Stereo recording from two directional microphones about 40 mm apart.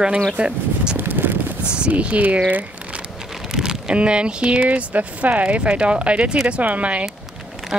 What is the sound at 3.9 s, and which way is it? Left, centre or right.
Speech, right.